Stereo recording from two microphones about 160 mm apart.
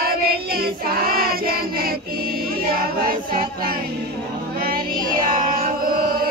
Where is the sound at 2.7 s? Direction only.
60° right (ahead or behind).